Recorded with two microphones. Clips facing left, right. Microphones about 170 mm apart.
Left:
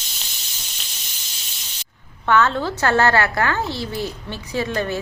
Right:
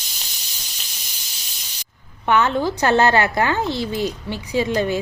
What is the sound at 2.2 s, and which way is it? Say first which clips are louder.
A woman's voice: even; 15° right (ahead or behind).